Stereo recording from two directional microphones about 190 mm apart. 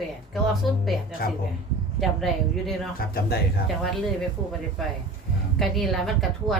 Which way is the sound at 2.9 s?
50° left (ahead or behind).